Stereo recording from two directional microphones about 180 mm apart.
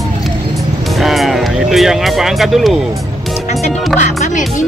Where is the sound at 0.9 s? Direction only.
Centre (ahead or behind).